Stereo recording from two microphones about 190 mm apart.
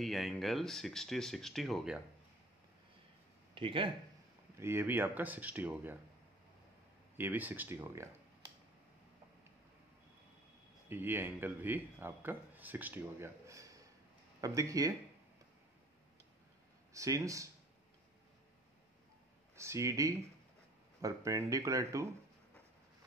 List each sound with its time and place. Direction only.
0.0 s speech: centre (ahead or behind)
3.5 s speech: 25° right (ahead or behind)
4.6 s speech: 10° right (ahead or behind)
7.2 s speech: 10° right (ahead or behind)
10.9 s speech: 10° right (ahead or behind)
16.9 s speech: 15° right (ahead or behind)
19.5 s speech: 15° right (ahead or behind)